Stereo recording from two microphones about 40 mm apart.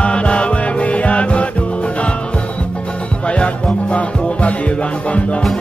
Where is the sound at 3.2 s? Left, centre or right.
Left.